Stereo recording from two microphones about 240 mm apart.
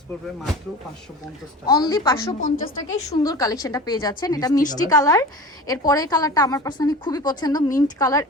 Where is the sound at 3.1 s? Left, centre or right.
Centre.